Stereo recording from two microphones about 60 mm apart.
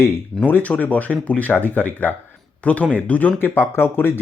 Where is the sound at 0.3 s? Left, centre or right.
Left.